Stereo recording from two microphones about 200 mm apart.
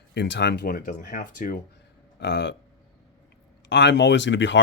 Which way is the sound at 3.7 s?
60° left (ahead or behind).